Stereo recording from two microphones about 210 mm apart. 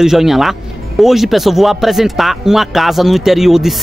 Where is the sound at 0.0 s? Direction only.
Centre (ahead or behind).